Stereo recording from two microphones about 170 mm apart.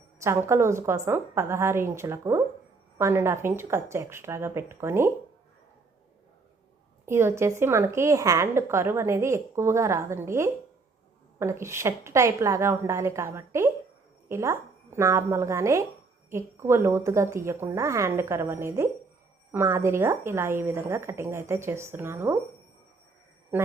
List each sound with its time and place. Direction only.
0.2 s a woman's voice: 15° right (ahead or behind)
7.0 s a woman's voice: 15° right (ahead or behind)